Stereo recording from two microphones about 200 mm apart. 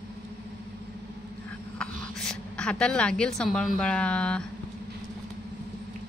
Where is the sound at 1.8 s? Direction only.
5° left (ahead or behind).